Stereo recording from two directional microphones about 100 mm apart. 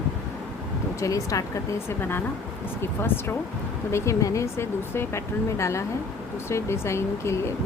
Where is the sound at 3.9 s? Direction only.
30° left (ahead or behind).